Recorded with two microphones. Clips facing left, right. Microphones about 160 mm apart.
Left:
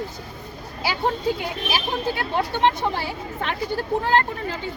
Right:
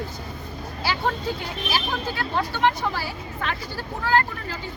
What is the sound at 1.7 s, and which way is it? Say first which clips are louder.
Speech: left 2 dB; 20° left (ahead or behind).